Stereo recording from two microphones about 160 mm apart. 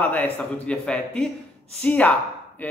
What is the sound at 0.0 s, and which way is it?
A man's voice, 10° left (ahead or behind).